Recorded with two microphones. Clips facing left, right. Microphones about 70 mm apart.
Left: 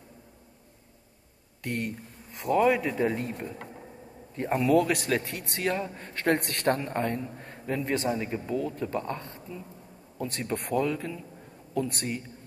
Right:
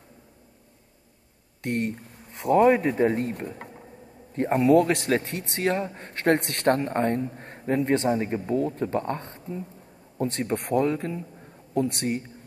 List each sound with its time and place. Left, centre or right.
2.3 s a man's voice: right
6.8 s a man's voice: right